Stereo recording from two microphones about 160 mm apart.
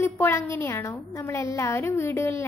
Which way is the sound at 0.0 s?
15° left (ahead or behind).